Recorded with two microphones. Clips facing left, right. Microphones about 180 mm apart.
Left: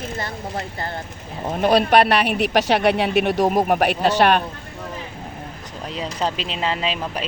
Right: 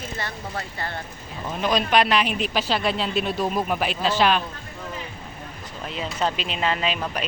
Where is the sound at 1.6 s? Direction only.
60° left (ahead or behind).